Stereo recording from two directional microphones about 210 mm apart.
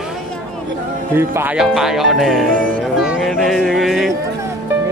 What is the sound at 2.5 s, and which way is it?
Music, 40° right (ahead or behind).